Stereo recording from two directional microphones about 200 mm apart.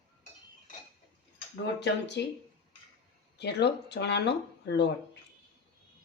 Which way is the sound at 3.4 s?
55° left (ahead or behind).